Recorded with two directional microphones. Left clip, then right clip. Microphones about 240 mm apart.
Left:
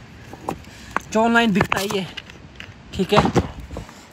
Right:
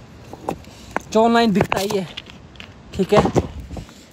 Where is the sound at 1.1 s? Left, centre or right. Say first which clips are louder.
Right 2 dB; centre.